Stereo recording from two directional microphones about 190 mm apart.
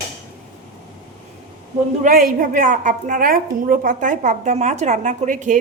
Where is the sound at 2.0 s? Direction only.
45° right (ahead or behind).